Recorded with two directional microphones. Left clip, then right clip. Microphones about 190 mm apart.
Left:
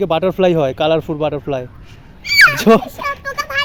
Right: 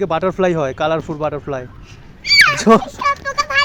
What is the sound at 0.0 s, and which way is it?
Speech, 30° left (ahead or behind).